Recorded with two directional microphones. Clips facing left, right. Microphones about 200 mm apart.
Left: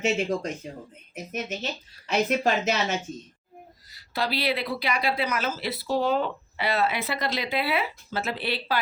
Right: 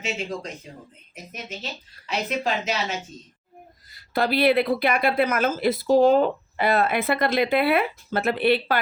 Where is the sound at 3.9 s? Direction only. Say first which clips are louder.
Right 6 dB; 55° right (ahead or behind).